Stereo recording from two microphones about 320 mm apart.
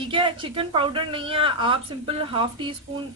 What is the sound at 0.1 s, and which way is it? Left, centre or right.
Speech, centre.